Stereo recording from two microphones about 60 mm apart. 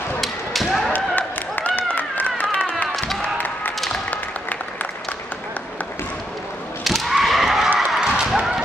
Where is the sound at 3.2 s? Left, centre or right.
Left.